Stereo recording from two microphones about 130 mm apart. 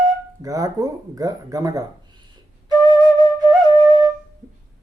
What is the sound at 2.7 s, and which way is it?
Flute, 30° right (ahead or behind).